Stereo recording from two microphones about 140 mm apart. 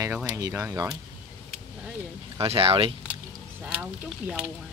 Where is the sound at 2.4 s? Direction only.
40° right (ahead or behind).